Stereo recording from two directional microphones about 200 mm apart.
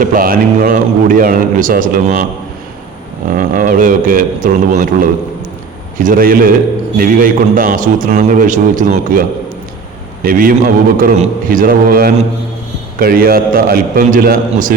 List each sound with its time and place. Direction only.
0.0 s a man's voice: 45° right (ahead or behind)
3.3 s a man's voice: 40° right (ahead or behind)
10.2 s a man's voice: 45° right (ahead or behind)